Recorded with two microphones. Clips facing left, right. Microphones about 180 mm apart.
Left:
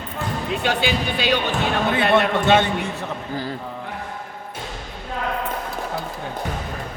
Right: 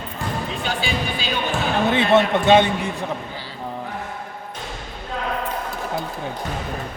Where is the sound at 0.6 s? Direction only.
65° left (ahead or behind).